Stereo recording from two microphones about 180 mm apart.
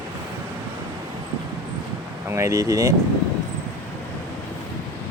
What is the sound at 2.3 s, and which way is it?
Speech, 15° right (ahead or behind).